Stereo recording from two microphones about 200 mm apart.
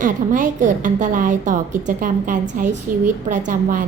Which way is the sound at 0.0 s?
40° right (ahead or behind).